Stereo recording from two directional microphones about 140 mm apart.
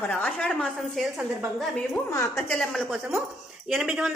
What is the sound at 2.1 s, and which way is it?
Speech, 20° left (ahead or behind).